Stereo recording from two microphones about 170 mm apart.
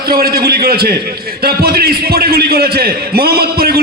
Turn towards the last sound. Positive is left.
turn(degrees=-65)  # may be behind; listen again after turning